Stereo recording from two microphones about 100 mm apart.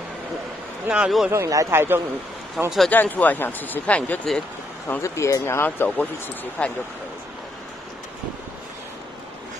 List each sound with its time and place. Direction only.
0.8 s a man's voice: 10° right (ahead or behind)
1.3 s a man's voice: 30° right (ahead or behind); by 2.7 s 15° right (ahead or behind)
2.9 s speech: 15° left (ahead or behind)
5.0 s speech: 30° left (ahead or behind)
5.9 s speech: 10° left (ahead or behind)